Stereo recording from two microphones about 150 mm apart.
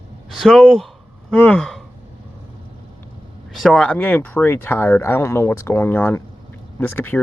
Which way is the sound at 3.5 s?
Centre (ahead or behind).